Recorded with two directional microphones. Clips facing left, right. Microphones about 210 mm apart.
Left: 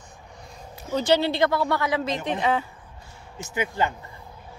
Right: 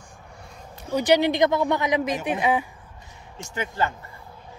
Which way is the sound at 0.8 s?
15° right (ahead or behind).